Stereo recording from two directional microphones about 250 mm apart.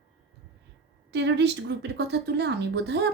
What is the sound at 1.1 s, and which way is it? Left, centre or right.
Speech, right.